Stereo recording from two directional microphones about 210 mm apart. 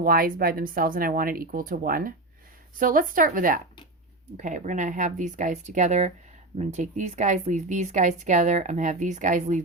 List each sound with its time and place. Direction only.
0.0 s speech: 45° right (ahead or behind)